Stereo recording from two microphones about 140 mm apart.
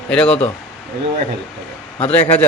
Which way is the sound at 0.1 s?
10° left (ahead or behind).